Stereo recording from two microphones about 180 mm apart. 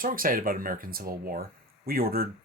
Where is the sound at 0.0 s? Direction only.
50° right (ahead or behind).